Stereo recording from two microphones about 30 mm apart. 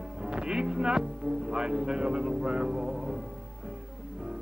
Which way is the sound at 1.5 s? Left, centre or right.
Right.